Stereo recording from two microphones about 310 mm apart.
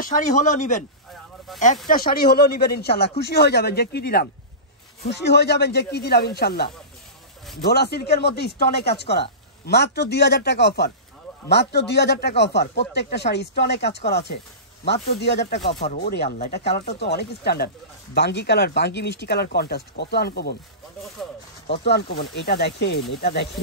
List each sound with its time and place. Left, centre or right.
0.0 s speech: left
1.9 s speech: left
21.6 s speech: left